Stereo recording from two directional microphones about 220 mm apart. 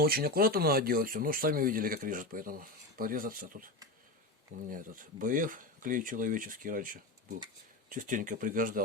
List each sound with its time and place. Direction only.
0.0 s speech: 45° right (ahead or behind)
4.7 s speech: 40° right (ahead or behind)